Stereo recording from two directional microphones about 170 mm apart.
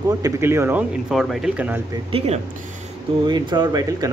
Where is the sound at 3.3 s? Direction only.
25° right (ahead or behind).